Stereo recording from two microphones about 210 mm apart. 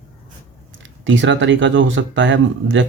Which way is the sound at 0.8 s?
60° right (ahead or behind).